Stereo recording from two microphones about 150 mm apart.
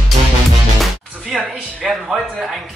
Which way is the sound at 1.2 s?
Centre (ahead or behind).